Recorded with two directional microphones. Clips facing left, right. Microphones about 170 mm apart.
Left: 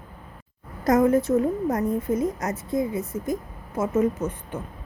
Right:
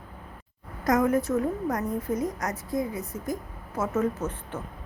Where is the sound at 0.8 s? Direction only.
25° left (ahead or behind).